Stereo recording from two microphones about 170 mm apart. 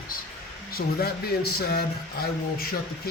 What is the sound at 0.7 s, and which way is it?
A man's voice, 65° left (ahead or behind).